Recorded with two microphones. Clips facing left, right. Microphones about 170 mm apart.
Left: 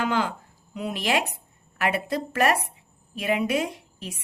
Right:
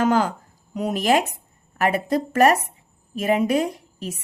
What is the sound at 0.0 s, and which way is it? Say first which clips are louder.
Speech: right 6 dB; 40° right (ahead or behind).